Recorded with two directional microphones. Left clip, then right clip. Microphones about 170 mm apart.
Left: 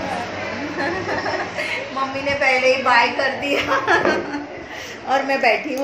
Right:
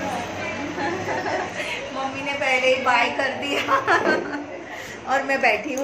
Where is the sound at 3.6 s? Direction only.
10° left (ahead or behind).